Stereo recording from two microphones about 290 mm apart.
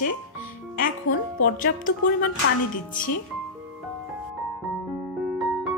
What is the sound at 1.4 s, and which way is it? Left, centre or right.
Speech, left.